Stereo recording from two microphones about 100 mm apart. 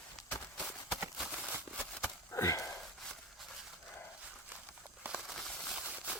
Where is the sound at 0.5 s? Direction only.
Centre (ahead or behind).